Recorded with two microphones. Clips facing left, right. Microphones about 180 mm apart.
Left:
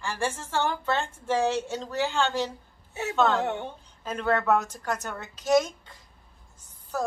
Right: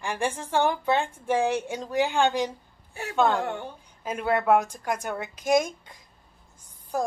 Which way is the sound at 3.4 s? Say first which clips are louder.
Left 2 dB; 20° left (ahead or behind).